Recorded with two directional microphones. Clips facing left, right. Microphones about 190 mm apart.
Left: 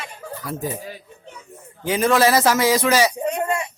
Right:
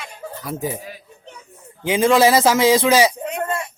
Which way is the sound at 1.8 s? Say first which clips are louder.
Right 3 dB; 20° right (ahead or behind).